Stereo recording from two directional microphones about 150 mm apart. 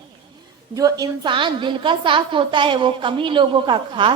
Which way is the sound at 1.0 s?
30° right (ahead or behind).